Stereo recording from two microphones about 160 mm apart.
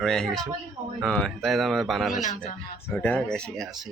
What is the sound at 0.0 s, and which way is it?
Speech, 5° left (ahead or behind).